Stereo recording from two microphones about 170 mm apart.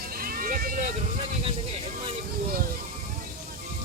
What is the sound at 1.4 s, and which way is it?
Speech, 35° right (ahead or behind).